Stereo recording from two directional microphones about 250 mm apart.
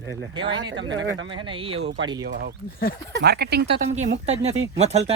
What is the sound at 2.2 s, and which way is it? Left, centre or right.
Speech, right.